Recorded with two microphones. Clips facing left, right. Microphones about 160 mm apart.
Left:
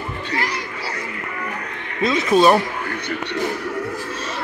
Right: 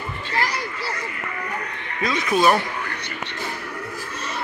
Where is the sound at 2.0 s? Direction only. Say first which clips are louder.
Left 5 dB; 25° left (ahead or behind).